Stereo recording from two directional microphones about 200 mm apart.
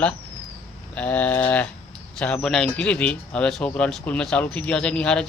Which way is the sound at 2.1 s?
5° left (ahead or behind).